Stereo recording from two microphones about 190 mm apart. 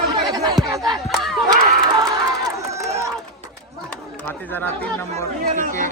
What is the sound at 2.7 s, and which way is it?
Crowd, 15° right (ahead or behind).